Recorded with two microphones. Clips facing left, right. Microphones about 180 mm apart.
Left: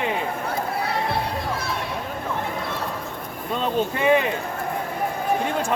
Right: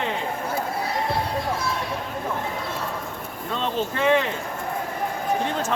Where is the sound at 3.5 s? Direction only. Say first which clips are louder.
Left 3 dB; 15° left (ahead or behind).